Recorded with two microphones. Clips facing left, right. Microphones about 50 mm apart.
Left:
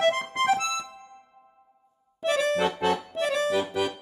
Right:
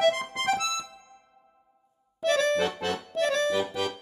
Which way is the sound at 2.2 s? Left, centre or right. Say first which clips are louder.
Even; centre.